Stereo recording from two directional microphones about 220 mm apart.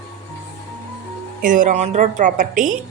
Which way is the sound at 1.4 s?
35° right (ahead or behind).